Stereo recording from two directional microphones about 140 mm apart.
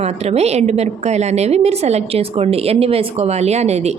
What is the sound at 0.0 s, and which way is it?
A woman's voice, 50° right (ahead or behind).